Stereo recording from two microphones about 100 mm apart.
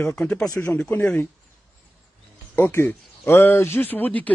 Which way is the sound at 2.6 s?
20° left (ahead or behind).